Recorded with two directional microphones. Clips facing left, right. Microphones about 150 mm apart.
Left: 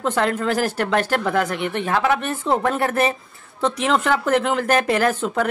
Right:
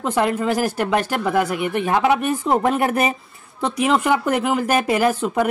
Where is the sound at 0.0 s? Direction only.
10° right (ahead or behind).